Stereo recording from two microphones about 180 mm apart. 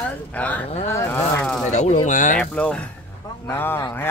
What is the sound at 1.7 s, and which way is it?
Speech, 40° left (ahead or behind).